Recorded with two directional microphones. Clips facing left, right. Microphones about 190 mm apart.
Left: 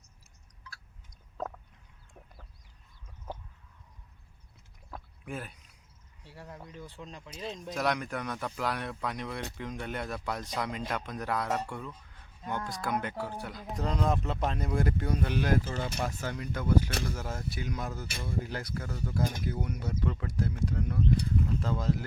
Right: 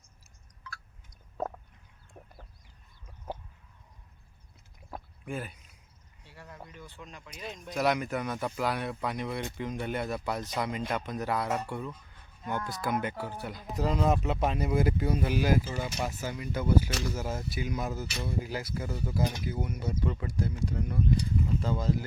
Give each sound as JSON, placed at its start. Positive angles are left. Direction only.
{"t": 2.2, "sound": "chicken", "side_deg": -5}
{"t": 5.2, "sound": "a sound", "side_deg": 0}
{"t": 6.2, "sound": "speech", "side_deg": 30}
{"t": 7.7, "sound": "speech", "side_deg": -5}
{"t": 16.9, "sound": "speech", "side_deg": 55}
{"t": 17.2, "sound": "speech", "side_deg": -5}